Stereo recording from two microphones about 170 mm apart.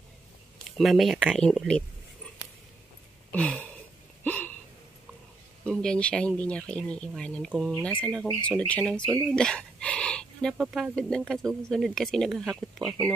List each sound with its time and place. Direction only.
0.7 s speech: centre (ahead or behind)
3.3 s a sound: 10° left (ahead or behind)
5.7 s speech: 5° left (ahead or behind)
12.8 s speech: 20° right (ahead or behind)